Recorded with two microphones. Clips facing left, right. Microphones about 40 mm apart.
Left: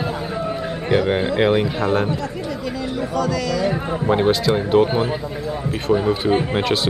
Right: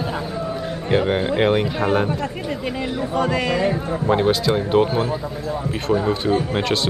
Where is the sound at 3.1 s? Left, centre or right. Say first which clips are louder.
Right 2 dB; right.